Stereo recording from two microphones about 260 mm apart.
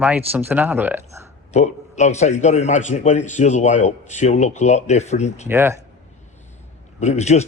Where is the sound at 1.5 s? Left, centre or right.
Left.